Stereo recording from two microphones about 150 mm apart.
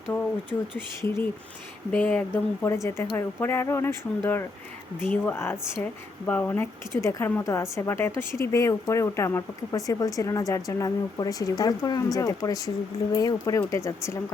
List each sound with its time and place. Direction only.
1.0 s speech: 15° left (ahead or behind)